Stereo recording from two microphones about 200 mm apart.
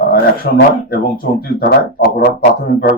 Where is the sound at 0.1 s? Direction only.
50° left (ahead or behind).